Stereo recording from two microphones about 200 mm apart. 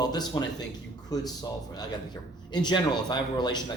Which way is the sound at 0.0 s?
20° left (ahead or behind).